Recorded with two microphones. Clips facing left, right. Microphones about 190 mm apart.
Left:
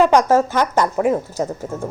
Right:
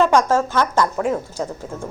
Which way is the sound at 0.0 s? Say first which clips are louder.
Left 2 dB; 15° left (ahead or behind).